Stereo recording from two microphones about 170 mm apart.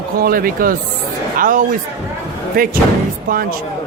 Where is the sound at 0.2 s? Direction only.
60° right (ahead or behind).